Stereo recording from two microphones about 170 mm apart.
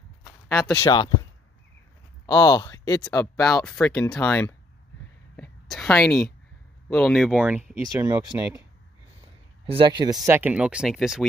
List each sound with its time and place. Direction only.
0.2 s speech: 15° left (ahead or behind)
2.2 s speech: 25° left (ahead or behind)
3.4 s speech: 5° left (ahead or behind)
5.3 s a sound: 5° left (ahead or behind)
6.9 s speech: 5° left (ahead or behind)
9.7 s speech: 30° right (ahead or behind); by 11.2 s centre (ahead or behind)